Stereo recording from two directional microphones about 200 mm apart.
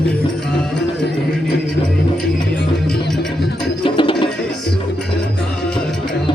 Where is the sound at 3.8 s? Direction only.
25° left (ahead or behind).